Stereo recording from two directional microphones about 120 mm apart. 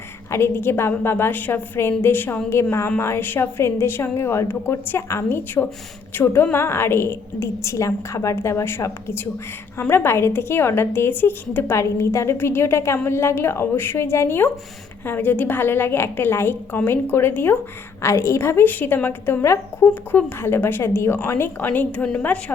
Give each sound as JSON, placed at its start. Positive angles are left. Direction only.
{"t": 0.3, "sound": "a woman's voice", "side_deg": 20}